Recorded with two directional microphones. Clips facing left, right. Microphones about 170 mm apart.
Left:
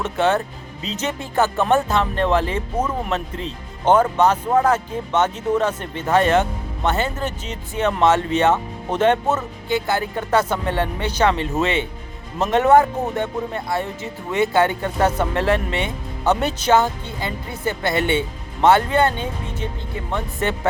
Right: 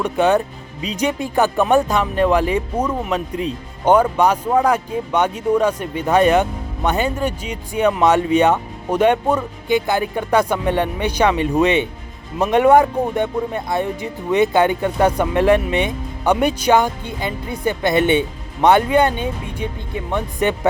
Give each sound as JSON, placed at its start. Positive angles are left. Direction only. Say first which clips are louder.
{"t": 0.0, "sound": "speech", "louder": "right 3 dB", "side_deg": -15}